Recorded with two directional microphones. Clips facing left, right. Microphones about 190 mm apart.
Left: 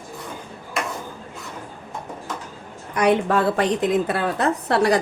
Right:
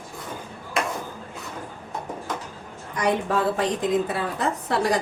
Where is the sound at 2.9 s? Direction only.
70° left (ahead or behind).